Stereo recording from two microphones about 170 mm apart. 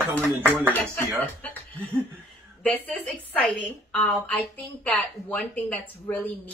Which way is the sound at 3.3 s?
10° left (ahead or behind).